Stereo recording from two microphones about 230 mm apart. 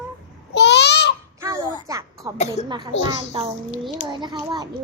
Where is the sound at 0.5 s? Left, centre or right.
Left.